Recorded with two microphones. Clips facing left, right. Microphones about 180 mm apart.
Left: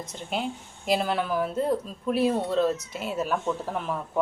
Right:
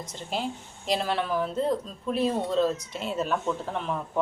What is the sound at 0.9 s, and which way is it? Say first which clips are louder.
A woman's voice: left 2 dB; 5° left (ahead or behind).